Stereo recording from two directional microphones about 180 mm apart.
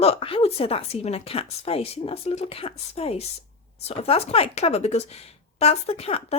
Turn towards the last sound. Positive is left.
turn(degrees=35)  # may be behind; listen again after turning